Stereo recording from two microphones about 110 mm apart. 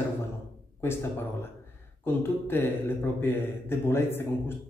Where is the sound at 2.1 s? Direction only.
20° left (ahead or behind).